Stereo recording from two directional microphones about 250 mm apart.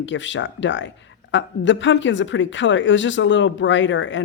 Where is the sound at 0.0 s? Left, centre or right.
Left.